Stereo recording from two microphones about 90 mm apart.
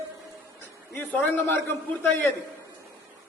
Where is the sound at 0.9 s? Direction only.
20° left (ahead or behind).